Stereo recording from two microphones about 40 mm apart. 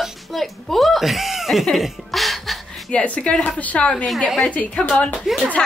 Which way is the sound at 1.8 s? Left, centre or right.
Centre.